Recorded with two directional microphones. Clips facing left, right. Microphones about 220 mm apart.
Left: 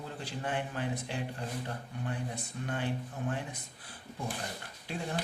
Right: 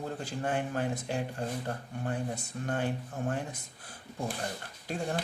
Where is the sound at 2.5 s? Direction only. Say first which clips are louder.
Right 2 dB; 45° right (ahead or behind).